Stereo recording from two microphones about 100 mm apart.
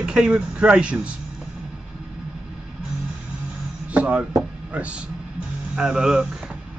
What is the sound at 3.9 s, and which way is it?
Speech, 15° right (ahead or behind).